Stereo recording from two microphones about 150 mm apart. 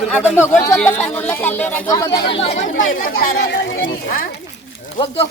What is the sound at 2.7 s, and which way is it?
Speech, 80° left.